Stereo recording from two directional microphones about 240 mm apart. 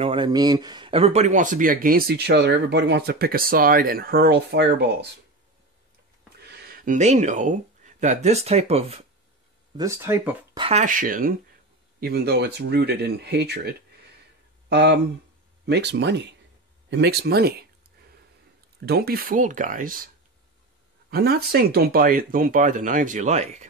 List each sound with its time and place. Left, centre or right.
0.0 s speech: right
6.4 s speech: right
9.8 s speech: centre; by 17.6 s right
18.9 s speech: right
21.1 s speech: right